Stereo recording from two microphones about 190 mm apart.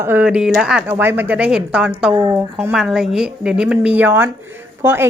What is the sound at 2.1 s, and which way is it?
Speech, 20° right (ahead or behind).